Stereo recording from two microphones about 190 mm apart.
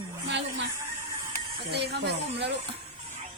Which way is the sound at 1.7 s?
60° right (ahead or behind).